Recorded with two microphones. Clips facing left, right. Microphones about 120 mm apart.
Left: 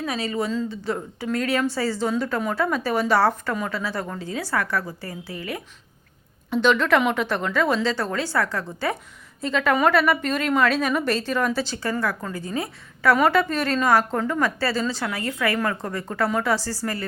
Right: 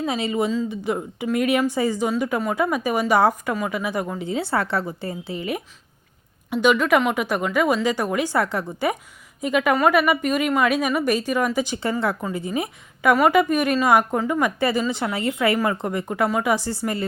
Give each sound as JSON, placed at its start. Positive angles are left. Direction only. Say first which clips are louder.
{"t": 0.0, "sound": "a woman's voice", "louder": "right 3 dB", "side_deg": -20}
{"t": 6.5, "sound": "a woman's voice", "louder": "right 1 dB", "side_deg": -10}